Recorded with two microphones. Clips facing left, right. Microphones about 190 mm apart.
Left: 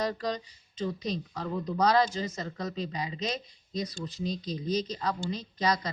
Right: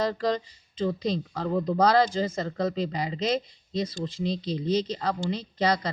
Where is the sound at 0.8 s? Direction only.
30° right (ahead or behind).